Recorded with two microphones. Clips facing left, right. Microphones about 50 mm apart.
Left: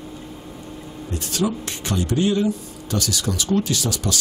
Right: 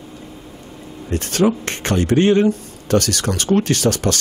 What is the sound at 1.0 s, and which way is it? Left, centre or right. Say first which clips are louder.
Speech: right 7 dB; right.